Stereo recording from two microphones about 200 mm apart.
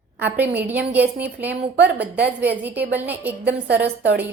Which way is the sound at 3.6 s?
55° right (ahead or behind).